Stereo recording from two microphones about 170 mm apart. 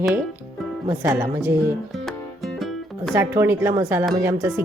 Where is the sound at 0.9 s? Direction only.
20° right (ahead or behind).